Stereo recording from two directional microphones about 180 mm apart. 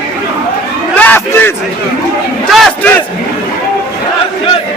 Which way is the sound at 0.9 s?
10° left (ahead or behind).